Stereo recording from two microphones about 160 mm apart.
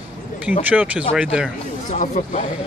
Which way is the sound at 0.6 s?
10° right (ahead or behind).